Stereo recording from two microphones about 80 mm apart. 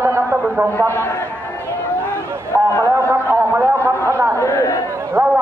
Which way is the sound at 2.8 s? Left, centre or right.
Right.